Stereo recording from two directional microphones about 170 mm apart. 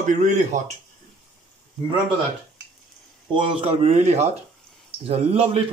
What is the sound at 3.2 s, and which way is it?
Speech, 30° right (ahead or behind).